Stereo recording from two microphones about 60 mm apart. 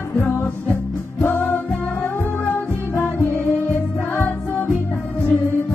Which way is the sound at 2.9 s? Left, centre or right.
Left.